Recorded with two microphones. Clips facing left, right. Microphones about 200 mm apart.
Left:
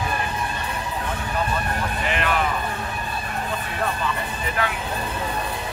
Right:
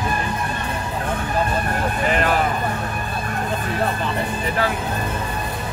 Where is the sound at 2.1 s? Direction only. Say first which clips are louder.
Right 4 dB; 40° right (ahead or behind).